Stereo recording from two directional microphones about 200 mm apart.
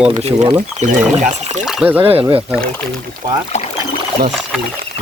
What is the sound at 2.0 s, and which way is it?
Speech, 30° right (ahead or behind).